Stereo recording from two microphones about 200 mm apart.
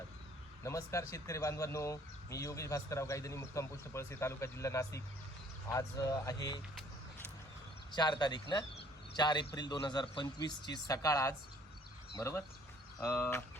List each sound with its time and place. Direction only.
0.6 s speech: 15° left (ahead or behind)
7.9 s speech: 20° left (ahead or behind)